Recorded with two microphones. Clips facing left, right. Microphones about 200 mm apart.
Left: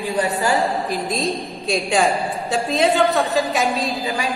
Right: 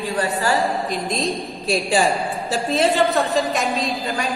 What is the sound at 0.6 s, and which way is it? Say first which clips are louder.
A woman's voice: left 1 dB; centre (ahead or behind).